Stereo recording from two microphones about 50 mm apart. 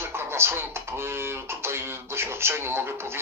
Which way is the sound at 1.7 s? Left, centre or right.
Right.